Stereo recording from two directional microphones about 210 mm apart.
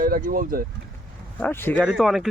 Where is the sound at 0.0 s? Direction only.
40° right (ahead or behind).